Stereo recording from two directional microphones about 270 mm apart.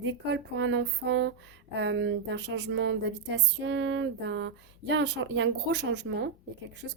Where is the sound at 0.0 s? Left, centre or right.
Right.